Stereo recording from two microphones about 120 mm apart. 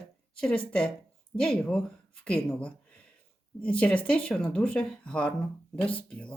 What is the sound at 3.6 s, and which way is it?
Speech, 10° left (ahead or behind).